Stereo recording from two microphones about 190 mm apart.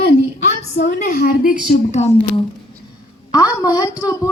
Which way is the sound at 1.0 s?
50° left (ahead or behind).